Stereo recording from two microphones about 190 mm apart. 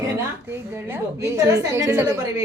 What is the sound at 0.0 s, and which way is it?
A woman's voice, 15° right (ahead or behind).